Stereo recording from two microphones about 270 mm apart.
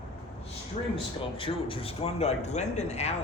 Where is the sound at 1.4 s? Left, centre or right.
Centre.